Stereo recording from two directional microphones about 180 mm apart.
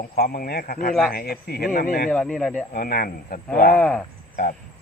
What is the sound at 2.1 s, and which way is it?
Speech, 5° left (ahead or behind).